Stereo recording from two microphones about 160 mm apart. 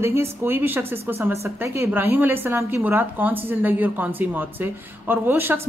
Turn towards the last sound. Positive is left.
turn(degrees=-15)  # may be behind; listen again after turning